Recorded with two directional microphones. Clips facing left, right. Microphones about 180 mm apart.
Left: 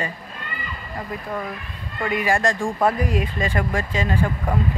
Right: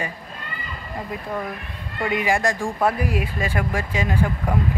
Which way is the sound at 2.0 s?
20° right (ahead or behind).